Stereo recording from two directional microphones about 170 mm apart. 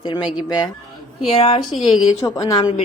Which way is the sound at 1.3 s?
35° left (ahead or behind).